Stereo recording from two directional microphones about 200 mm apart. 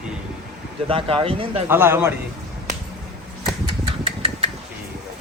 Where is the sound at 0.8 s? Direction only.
25° right (ahead or behind).